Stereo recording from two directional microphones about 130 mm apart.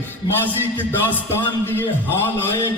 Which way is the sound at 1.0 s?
15° left (ahead or behind).